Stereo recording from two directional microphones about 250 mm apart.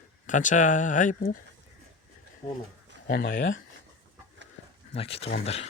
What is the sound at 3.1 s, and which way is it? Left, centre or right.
Speech, left.